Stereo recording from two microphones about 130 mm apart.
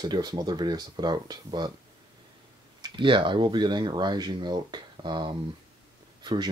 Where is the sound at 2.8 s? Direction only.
35° right (ahead or behind).